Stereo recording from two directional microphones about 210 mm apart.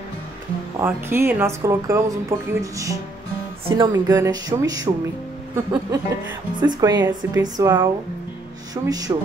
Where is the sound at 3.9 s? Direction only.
15° right (ahead or behind).